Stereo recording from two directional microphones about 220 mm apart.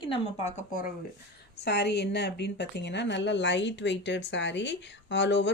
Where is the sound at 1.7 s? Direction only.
50° left (ahead or behind).